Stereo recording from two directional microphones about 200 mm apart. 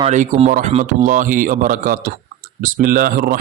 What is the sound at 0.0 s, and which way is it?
Speech, 35° right (ahead or behind).